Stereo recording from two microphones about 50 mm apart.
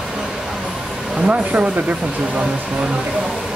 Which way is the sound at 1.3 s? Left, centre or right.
Right.